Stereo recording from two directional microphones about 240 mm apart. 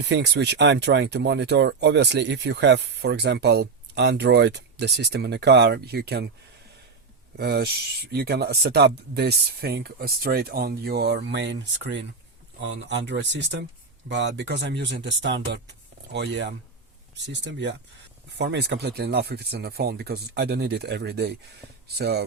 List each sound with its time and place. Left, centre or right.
0.0 s speech: right
7.3 s speech: right